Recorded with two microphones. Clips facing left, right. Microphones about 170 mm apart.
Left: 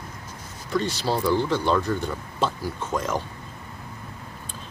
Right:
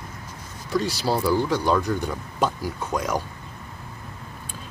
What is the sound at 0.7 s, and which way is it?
Speech, 10° right (ahead or behind).